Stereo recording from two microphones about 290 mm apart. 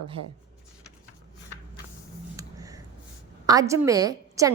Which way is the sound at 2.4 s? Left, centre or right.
Centre.